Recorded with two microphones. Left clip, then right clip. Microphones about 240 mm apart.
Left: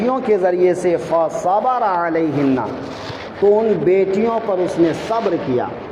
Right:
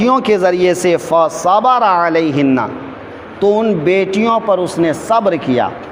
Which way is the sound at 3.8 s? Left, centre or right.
Right.